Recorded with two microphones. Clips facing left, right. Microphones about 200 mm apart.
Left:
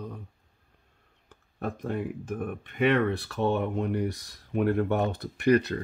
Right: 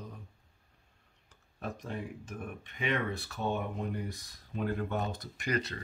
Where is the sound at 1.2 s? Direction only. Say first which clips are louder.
Left 7 dB; 55° left (ahead or behind).